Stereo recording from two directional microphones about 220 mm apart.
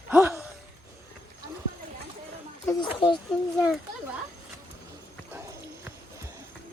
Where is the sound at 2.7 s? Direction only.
20° left (ahead or behind).